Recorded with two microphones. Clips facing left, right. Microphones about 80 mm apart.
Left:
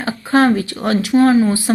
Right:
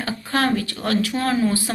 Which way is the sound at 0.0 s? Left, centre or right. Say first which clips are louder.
Left 8 dB; left.